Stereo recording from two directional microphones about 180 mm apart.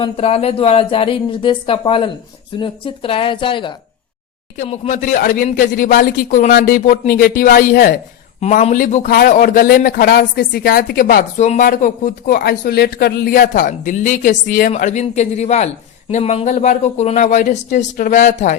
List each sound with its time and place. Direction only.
0.0 s speech: 35° left (ahead or behind)
4.6 s speech: 40° left (ahead or behind)
8.4 s speech: 40° left (ahead or behind)